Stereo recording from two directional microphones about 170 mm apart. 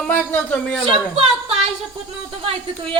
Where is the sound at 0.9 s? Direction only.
35° right (ahead or behind).